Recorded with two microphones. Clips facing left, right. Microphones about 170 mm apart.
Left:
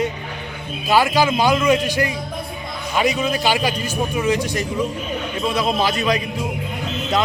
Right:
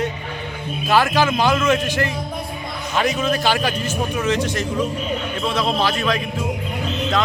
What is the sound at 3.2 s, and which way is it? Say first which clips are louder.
A man's voice: even; 15° left (ahead or behind).